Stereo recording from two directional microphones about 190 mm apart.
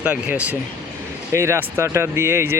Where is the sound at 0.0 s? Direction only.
5° right (ahead or behind).